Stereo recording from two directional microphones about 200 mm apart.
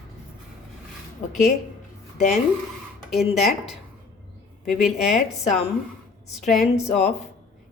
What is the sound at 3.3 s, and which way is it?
A woman's voice, centre (ahead or behind).